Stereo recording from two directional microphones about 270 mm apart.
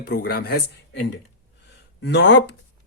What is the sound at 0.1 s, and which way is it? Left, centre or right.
Speech, left.